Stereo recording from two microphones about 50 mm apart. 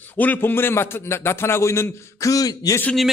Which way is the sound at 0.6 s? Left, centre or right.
Left.